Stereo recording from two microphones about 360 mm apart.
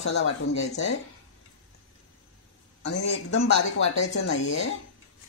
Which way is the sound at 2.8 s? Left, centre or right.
Left.